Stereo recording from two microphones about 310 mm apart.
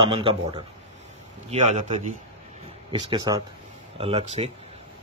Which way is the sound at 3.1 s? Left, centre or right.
Centre.